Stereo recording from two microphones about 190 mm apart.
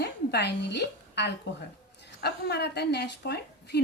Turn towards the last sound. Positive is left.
turn(degrees=60)  # may be behind; listen again after turning